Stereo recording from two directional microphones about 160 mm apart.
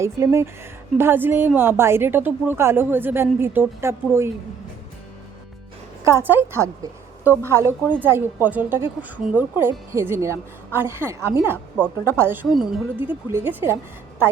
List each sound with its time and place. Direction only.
0.0 s speech: 20° right (ahead or behind)
6.1 s speech: 15° right (ahead or behind)
12.5 s a woman's voice: centre (ahead or behind)
13.0 s speech: 10° right (ahead or behind)